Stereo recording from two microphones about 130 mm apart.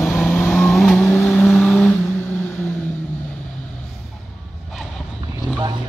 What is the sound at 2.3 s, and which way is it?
Vehicle, 15° left (ahead or behind).